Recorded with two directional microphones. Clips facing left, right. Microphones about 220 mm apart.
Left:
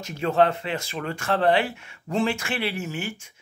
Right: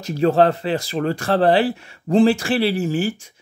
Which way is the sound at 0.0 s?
35° right (ahead or behind).